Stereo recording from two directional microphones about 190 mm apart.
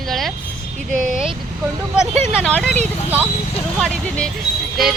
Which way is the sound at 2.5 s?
5° left (ahead or behind).